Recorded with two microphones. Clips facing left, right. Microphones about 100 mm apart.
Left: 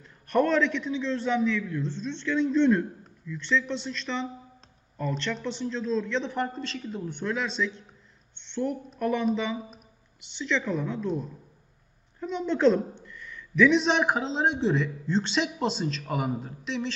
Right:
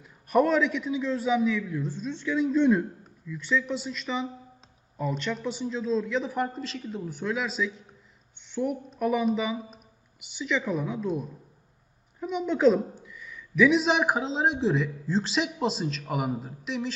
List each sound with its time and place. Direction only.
0.0 s a man's voice: 10° right (ahead or behind)